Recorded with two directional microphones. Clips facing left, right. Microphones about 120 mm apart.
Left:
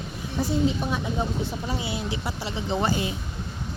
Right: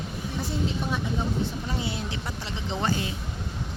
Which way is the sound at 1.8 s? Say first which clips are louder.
Left 2 dB; 5° left (ahead or behind).